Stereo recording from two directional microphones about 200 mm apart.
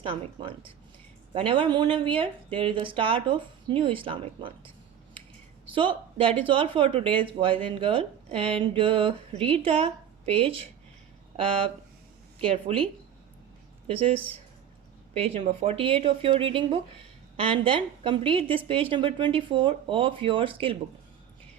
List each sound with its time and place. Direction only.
0.0 s a woman's voice: 25° right (ahead or behind)
5.7 s a woman's voice: 25° right (ahead or behind)
12.4 s a woman's voice: 30° right (ahead or behind)